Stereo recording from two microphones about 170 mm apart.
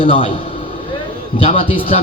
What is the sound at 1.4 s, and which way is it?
Speech, 35° left (ahead or behind).